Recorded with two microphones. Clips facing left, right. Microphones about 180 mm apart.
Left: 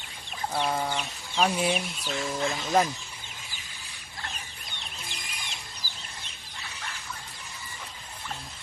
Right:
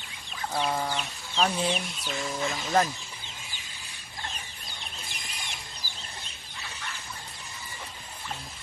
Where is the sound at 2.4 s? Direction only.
5° left (ahead or behind).